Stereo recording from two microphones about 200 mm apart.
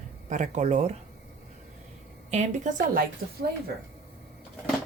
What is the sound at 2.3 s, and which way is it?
Speech, 35° right (ahead or behind).